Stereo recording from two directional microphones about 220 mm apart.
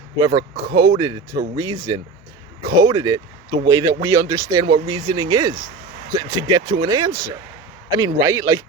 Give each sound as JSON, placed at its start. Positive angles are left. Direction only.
{"t": 0.2, "sound": "speech", "side_deg": -15}